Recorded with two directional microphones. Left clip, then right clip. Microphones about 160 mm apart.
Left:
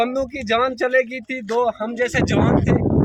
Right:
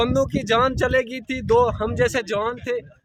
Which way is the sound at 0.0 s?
45° right (ahead or behind).